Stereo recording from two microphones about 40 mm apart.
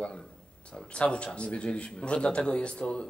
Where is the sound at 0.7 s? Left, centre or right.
Left.